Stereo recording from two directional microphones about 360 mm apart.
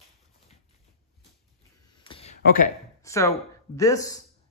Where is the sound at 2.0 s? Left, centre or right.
Centre.